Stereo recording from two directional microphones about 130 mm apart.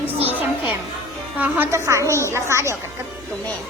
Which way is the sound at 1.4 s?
15° right (ahead or behind).